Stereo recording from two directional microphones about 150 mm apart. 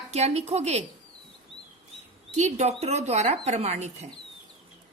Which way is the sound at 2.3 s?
50° right (ahead or behind).